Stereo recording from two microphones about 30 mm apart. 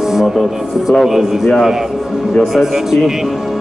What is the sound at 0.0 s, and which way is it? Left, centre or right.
Music, centre.